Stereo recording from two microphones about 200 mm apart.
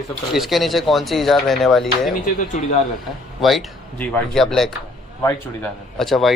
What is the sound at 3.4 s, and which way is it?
Speech, centre (ahead or behind).